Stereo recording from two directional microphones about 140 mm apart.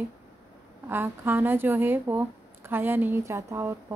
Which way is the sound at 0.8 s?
15° right (ahead or behind).